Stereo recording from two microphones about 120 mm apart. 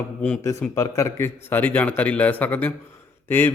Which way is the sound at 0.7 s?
25° left (ahead or behind).